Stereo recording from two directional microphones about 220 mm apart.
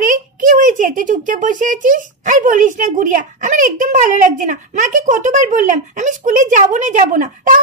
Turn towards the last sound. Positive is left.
turn(degrees=-35)  # may be behind; listen again after turning